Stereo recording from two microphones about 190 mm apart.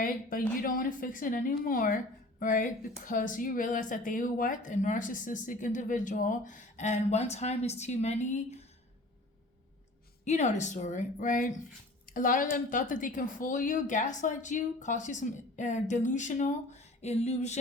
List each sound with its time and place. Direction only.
0.0 s speech: 45° left (ahead or behind)
10.2 s a woman's voice: 40° left (ahead or behind)